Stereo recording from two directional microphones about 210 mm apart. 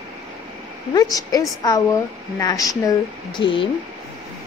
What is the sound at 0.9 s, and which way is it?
A woman's voice, 20° left (ahead or behind).